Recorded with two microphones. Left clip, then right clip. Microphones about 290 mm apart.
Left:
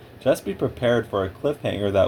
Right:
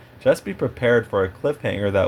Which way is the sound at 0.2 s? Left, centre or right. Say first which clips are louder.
Right 2 dB; right.